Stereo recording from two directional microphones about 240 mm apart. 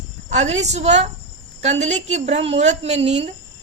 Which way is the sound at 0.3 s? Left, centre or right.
Right.